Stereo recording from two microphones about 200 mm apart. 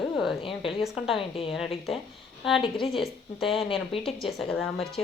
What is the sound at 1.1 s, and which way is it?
Speech, 25° left (ahead or behind).